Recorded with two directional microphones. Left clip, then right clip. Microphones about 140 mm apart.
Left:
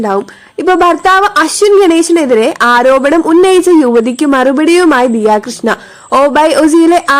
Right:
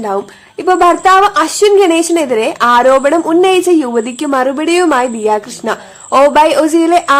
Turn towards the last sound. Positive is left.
turn(degrees=25)  # may be behind; listen again after turning